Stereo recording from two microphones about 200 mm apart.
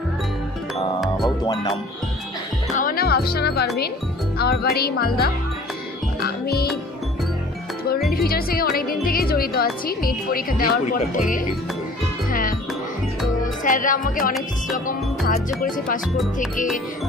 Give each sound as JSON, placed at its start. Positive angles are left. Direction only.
{"t": 1.0, "sound": "music", "side_deg": 0}
{"t": 1.4, "sound": "music", "side_deg": 20}
{"t": 2.7, "sound": "a woman's voice", "side_deg": 45}
{"t": 6.2, "sound": "music", "side_deg": 50}
{"t": 8.1, "sound": "a woman's voice", "side_deg": 50}
{"t": 12.3, "sound": "music", "side_deg": 45}
{"t": 13.7, "sound": "speech", "side_deg": 40}
{"t": 14.9, "sound": "music", "side_deg": 40}